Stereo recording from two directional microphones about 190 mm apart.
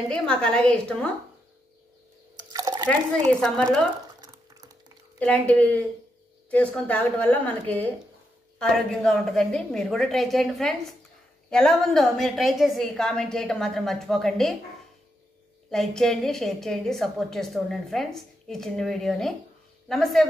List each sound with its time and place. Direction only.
0.1 s a woman's voice: 5° left (ahead or behind)
2.3 s a sound: 20° right (ahead or behind)
3.3 s a woman's voice: centre (ahead or behind)
4.2 s a sound: 20° right (ahead or behind)
5.2 s a woman's voice: 10° left (ahead or behind)
15.7 s a woman's voice: centre (ahead or behind)